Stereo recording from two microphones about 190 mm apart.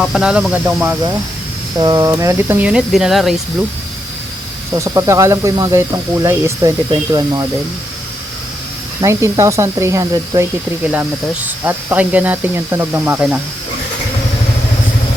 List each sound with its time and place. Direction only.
0.0 s speech: centre (ahead or behind)
4.7 s speech: 15° right (ahead or behind)
9.0 s speech: 15° right (ahead or behind)
11.4 s speech: 10° right (ahead or behind)